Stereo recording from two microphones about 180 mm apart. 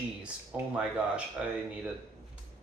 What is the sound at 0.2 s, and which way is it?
Speech, 5° right (ahead or behind).